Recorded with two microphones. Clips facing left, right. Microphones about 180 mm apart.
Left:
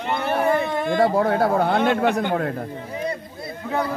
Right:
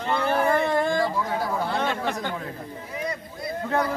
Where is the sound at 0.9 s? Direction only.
60° left (ahead or behind).